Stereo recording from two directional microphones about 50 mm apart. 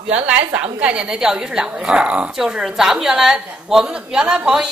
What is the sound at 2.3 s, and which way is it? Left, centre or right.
A woman's voice, centre.